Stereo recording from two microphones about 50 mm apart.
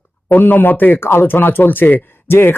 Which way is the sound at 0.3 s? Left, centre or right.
Left.